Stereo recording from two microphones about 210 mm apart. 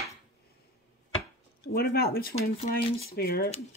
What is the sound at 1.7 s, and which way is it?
Speech, 45° left (ahead or behind).